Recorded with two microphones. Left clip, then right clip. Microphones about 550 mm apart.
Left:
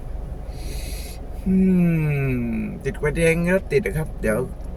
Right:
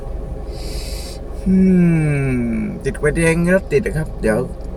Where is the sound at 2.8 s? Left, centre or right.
Left.